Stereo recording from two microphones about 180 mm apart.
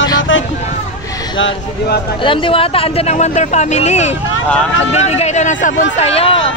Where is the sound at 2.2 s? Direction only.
30° left (ahead or behind).